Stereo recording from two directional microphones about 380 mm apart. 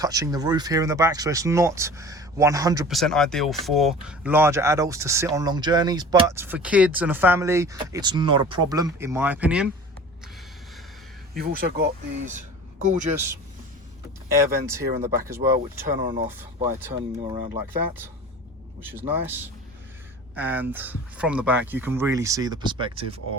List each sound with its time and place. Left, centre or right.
0.0 s speech: centre
11.3 s speech: right
14.3 s speech: centre